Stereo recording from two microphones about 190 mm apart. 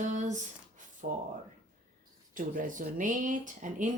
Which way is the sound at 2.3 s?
45° right (ahead or behind).